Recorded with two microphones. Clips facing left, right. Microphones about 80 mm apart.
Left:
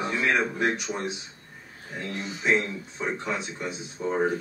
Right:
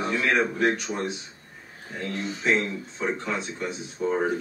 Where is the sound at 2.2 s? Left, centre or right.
Centre.